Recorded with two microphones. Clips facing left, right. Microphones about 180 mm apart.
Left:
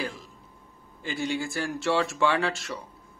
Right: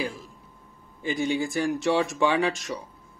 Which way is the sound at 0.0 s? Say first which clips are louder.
Right 3 dB; 10° right (ahead or behind).